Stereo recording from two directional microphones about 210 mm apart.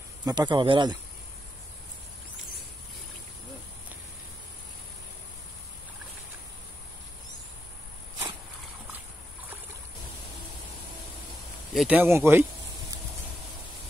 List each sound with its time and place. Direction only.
0.2 s speech: 20° right (ahead or behind)
11.7 s speech: 5° right (ahead or behind)